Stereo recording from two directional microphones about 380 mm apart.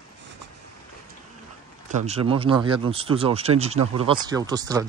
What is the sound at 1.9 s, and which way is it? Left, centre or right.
Speech, centre.